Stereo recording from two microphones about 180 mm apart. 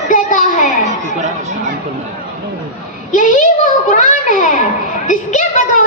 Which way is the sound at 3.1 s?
45° left (ahead or behind).